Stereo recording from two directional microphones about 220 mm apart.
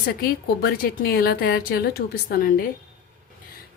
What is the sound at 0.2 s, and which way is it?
A woman's voice, 40° left (ahead or behind).